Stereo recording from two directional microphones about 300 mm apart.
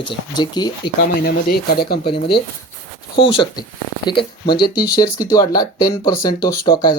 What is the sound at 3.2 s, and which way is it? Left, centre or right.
Speech, centre.